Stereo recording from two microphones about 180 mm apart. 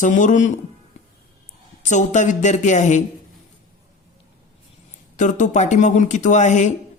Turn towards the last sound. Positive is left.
turn(degrees=40)  # may be behind; listen again after turning